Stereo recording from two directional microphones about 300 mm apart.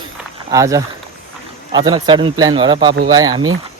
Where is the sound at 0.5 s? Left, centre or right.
Centre.